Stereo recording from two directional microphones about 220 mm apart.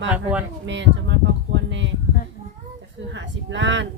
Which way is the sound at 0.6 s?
55° right (ahead or behind).